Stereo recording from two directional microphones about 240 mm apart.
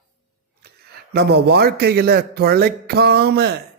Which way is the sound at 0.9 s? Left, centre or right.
Right.